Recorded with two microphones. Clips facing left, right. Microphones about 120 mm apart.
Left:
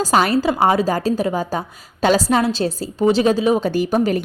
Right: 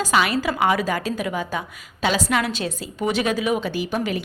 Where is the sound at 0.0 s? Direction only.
40° left (ahead or behind).